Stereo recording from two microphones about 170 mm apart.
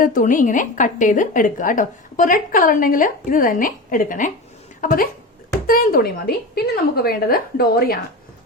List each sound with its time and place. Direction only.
0.0 s a woman's voice: 50° left (ahead or behind)